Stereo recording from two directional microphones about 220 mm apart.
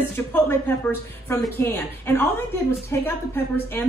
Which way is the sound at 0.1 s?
10° left (ahead or behind).